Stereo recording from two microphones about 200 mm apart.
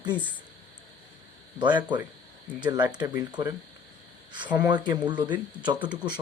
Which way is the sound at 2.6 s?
20° right (ahead or behind).